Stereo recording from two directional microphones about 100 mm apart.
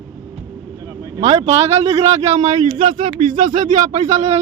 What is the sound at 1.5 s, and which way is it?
Speech, 90° right.